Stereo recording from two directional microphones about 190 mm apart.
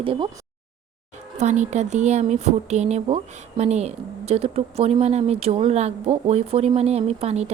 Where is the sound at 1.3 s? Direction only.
40° right (ahead or behind).